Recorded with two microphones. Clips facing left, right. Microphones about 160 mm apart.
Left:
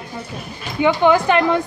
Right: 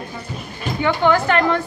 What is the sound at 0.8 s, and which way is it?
Speech, 15° left (ahead or behind).